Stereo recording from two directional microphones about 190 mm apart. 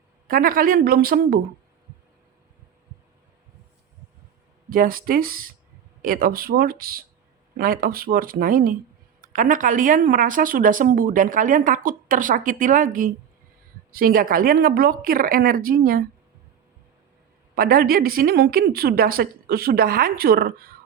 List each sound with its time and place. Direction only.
0.3 s a woman's voice: 50° right (ahead or behind)
4.7 s a woman's voice: 50° right (ahead or behind)
17.5 s a woman's voice: 50° right (ahead or behind)